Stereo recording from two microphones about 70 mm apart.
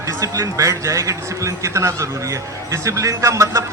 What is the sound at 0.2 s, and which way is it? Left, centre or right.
A man's voice, right.